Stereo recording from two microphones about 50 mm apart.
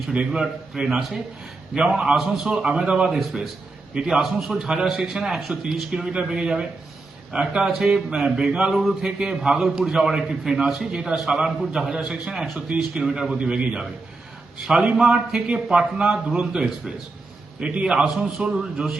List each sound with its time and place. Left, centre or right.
0.3 s a man's voice: centre
8.7 s a man's voice: centre
12.5 s a man's voice: centre
14.9 s a man's voice: centre